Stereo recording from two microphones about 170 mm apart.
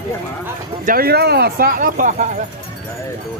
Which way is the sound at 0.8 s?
60° right (ahead or behind).